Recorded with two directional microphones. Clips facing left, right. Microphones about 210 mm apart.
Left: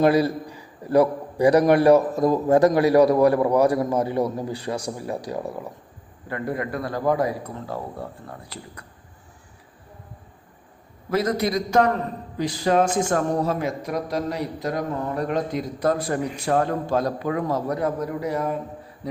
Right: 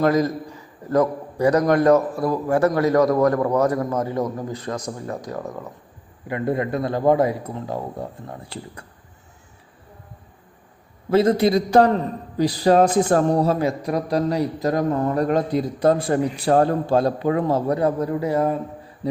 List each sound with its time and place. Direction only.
0.0 s a man's voice: 10° left (ahead or behind)
6.2 s a man's voice: 20° right (ahead or behind)
11.1 s a man's voice: 30° right (ahead or behind)